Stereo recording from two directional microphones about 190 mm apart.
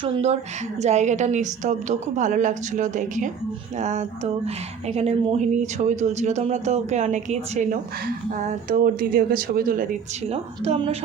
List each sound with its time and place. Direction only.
0.0 s speech: 35° right (ahead or behind)
10.2 s speech: 35° right (ahead or behind)